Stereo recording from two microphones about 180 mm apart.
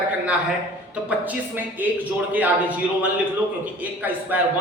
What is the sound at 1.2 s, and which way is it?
A man's voice, 10° right (ahead or behind).